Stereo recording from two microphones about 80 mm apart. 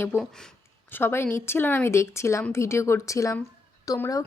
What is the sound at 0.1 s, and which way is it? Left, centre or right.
Speech, left.